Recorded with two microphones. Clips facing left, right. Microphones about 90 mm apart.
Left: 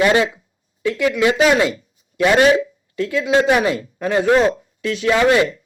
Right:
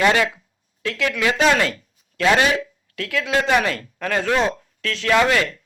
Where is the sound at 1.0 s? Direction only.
15° left (ahead or behind).